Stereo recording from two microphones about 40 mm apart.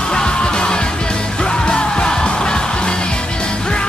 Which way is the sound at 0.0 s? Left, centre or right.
Left.